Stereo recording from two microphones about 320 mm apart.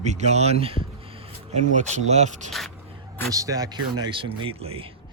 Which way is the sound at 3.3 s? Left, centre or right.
Centre.